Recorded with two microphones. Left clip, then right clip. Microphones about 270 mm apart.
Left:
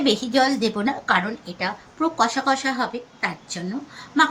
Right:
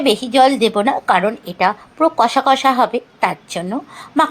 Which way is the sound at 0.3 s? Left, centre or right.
Right.